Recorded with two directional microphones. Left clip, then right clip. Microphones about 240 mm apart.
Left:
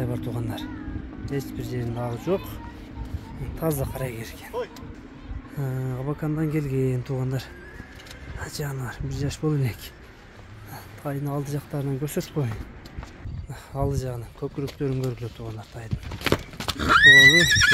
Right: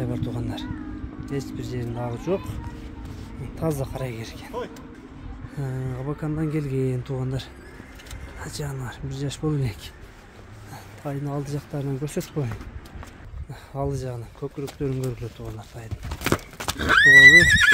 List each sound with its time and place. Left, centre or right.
0.0 s speech: centre
5.6 s speech: centre
16.2 s a sound: right
16.7 s speech: centre